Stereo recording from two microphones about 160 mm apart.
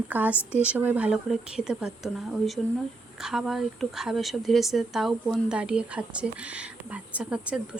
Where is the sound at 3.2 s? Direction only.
5° right (ahead or behind).